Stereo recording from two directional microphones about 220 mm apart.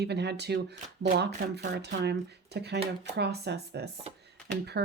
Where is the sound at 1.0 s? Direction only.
40° right (ahead or behind).